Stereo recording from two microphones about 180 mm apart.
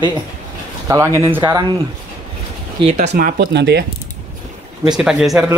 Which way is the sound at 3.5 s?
70° right (ahead or behind).